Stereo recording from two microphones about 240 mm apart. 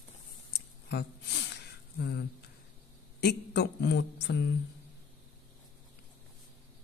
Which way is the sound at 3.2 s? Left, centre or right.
Left.